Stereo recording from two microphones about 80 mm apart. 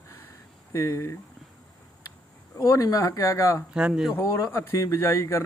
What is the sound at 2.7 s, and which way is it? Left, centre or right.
Speech, left.